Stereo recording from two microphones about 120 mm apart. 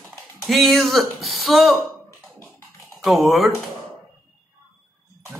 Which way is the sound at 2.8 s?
Centre (ahead or behind).